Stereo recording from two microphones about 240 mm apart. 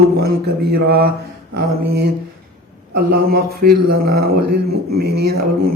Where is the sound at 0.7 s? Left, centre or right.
Right.